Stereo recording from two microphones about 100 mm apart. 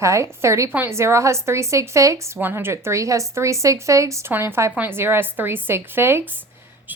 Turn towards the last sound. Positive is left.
turn(degrees=-20)  # may be behind; listen again after turning